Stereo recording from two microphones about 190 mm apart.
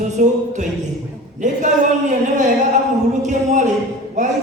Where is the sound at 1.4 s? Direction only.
40° right (ahead or behind).